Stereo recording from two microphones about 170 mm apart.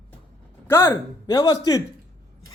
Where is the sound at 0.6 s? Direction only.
15° left (ahead or behind).